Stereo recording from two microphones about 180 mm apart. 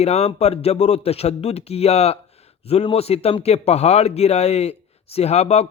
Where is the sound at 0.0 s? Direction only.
35° left (ahead or behind).